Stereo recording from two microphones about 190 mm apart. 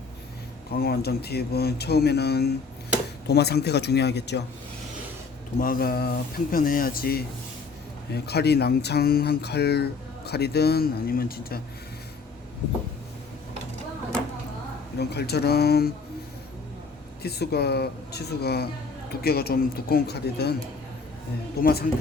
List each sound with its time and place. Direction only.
0.7 s speech: 55° left (ahead or behind)
5.5 s speech: 50° left (ahead or behind)
14.9 s speech: 60° left (ahead or behind)
17.2 s speech: 55° left (ahead or behind)
21.6 s speech: 55° left (ahead or behind)